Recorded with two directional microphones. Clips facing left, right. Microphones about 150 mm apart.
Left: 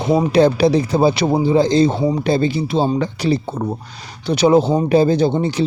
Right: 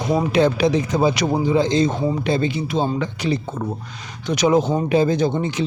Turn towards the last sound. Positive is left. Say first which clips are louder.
# left 4 dB
turn(degrees=35)  # may be behind; listen again after turning